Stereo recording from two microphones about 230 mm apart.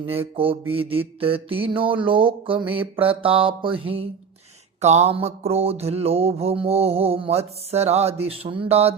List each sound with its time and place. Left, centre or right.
0.0 s mantra: right